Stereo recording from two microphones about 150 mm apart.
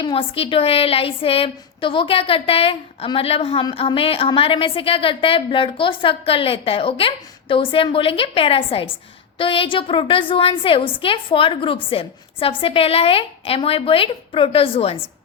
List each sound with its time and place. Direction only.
0.0 s a woman's voice: 35° left (ahead or behind)